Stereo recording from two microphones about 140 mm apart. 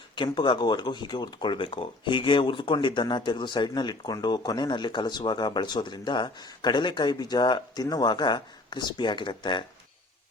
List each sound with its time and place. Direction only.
0.2 s speech: 35° left (ahead or behind)